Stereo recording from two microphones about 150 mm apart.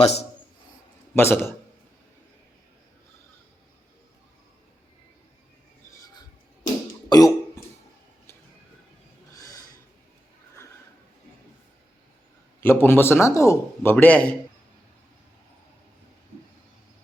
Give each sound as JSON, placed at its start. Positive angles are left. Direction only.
{"t": 0.0, "sound": "a man's voice", "side_deg": 45}
{"t": 1.1, "sound": "a man's voice", "side_deg": 15}
{"t": 7.1, "sound": "cough", "side_deg": 25}
{"t": 9.3, "sound": "a sound", "side_deg": 25}
{"t": 12.5, "sound": "a man's voice", "side_deg": 15}